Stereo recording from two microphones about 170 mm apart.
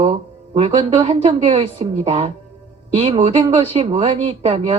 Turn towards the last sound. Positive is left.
turn(degrees=-30)  # may be behind; listen again after turning